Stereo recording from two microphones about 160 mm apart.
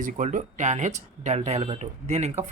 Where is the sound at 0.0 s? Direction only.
55° right (ahead or behind).